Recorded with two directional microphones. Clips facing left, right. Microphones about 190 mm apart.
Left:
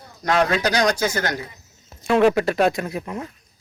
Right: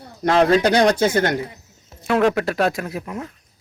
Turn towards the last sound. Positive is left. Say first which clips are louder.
# even
turn(degrees=0)  # may be behind; listen again after turning